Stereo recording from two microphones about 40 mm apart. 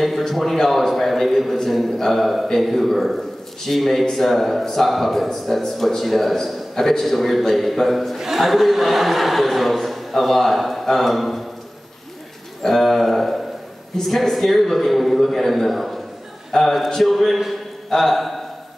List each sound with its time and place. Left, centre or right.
0.3 s a man's voice: centre
8.2 s a man's voice: centre
12.6 s a man's voice: centre
16.5 s a man's voice: centre
16.9 s a man's voice: centre